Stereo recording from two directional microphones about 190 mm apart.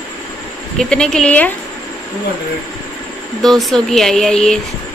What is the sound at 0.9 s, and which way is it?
Speech, 5° left (ahead or behind).